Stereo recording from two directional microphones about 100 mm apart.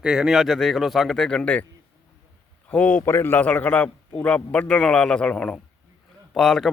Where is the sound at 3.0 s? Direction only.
25° left (ahead or behind); by 6.7 s centre (ahead or behind).